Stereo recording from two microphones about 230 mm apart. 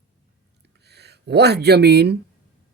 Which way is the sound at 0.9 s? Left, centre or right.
Right.